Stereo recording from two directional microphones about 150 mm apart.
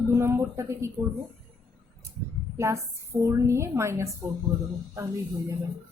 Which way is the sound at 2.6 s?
20° right (ahead or behind).